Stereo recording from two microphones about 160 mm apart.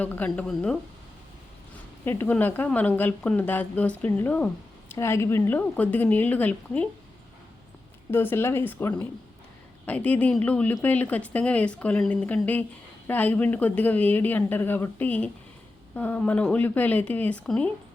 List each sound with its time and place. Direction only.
0.0 s speech: 10° left (ahead or behind)
2.0 s speech: 10° left (ahead or behind)
8.1 s speech: 15° left (ahead or behind)